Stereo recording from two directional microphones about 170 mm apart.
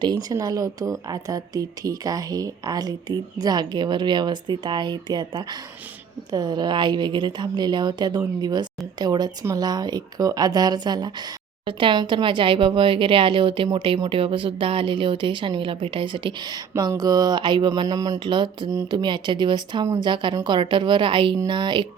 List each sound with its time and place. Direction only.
0.0 s speech: 25° right (ahead or behind)